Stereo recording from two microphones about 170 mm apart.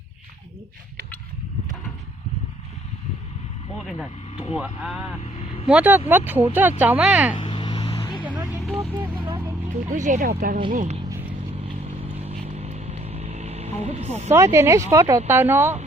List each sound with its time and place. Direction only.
4.5 s speech: 10° right (ahead or behind)
7.4 s vehicle: 25° left (ahead or behind)
9.0 s vehicle: 25° right (ahead or behind)
9.6 s speech: 45° right (ahead or behind)
12.1 s vehicle: 35° right (ahead or behind)
14.3 s speech: 15° right (ahead or behind)